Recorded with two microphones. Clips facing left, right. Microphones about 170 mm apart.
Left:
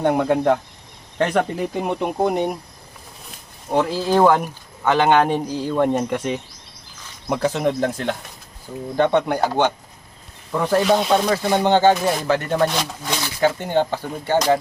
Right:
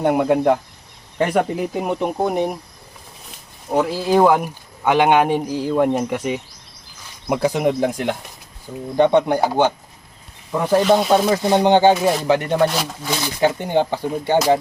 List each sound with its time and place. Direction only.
0.0 s speech: 10° right (ahead or behind)
11.4 s speech: 20° right (ahead or behind)
12.5 s speech: 5° right (ahead or behind)